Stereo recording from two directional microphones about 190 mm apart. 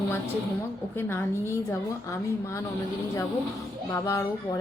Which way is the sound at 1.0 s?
10° left (ahead or behind).